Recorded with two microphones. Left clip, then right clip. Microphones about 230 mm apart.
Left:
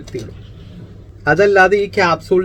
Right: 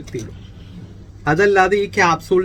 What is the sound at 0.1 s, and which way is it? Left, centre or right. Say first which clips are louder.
Speech: left 2 dB; centre.